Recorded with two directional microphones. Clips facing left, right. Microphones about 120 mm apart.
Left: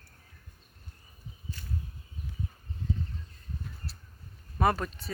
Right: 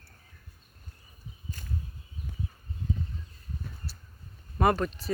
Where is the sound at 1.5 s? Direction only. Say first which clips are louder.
Right 1 dB; 45° right (ahead or behind).